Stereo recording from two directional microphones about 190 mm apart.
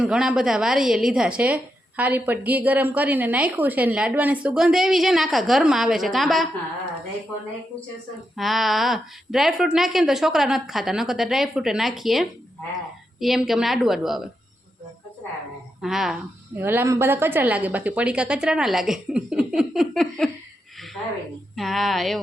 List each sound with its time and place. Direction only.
0.0 s a woman's voice: 5° right (ahead or behind)
8.4 s a woman's voice: centre (ahead or behind)
15.8 s a woman's voice: centre (ahead or behind)
21.5 s a woman's voice: centre (ahead or behind)